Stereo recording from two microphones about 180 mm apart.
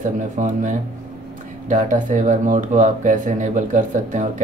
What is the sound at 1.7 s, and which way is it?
Speech, 45° right (ahead or behind).